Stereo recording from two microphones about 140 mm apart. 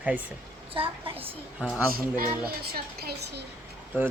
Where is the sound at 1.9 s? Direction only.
90° right.